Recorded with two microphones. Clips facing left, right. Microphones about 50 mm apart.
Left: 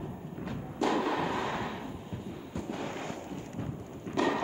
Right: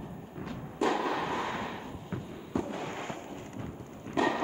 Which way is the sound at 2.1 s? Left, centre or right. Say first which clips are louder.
Right 4 dB; right.